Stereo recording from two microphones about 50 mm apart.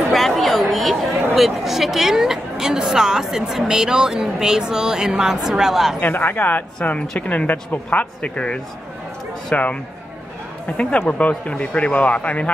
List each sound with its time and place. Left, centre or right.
0.1 s a sound: centre
1.3 s a woman's voice: centre
5.9 s a woman's voice: left
9.5 s speech: left
11.0 s speech: left